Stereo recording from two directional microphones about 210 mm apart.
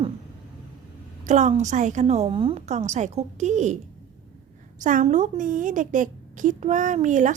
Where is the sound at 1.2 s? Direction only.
35° right (ahead or behind).